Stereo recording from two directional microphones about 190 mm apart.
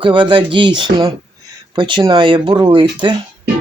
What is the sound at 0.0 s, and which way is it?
Speech, 25° right (ahead or behind).